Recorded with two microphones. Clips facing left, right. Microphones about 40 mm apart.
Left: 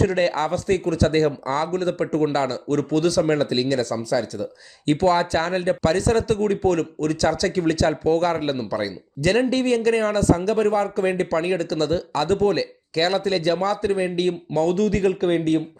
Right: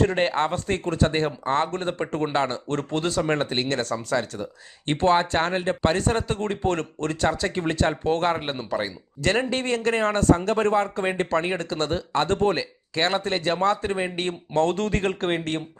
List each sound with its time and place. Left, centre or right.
0.0 s speech: right